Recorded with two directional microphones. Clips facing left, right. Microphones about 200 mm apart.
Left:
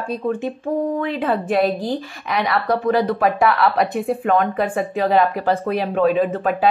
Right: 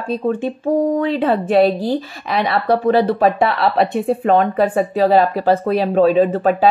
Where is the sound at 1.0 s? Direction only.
30° right (ahead or behind).